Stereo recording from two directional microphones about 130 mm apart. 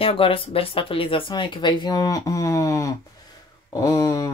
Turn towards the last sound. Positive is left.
turn(degrees=25)  # may be behind; listen again after turning